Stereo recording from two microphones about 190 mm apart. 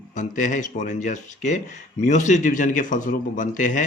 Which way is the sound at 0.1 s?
40° left (ahead or behind).